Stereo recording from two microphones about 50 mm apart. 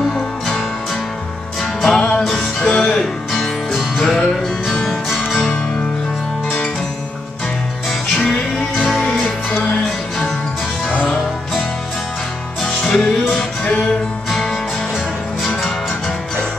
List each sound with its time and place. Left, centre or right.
1.6 s music: centre
2.0 s music: centre
3.3 s music: centre
8.2 s music: centre
9.2 s music: left
12.8 s music: centre
14.3 s music: centre